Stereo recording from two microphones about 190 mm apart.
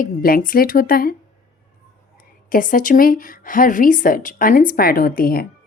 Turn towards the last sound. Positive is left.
turn(degrees=50)  # may be behind; listen again after turning